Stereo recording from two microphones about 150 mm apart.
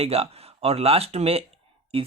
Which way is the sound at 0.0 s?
45° right (ahead or behind).